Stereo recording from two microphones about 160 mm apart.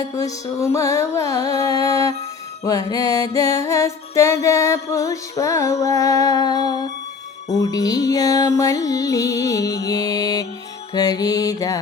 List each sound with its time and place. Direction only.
0.0 s music: 20° left (ahead or behind)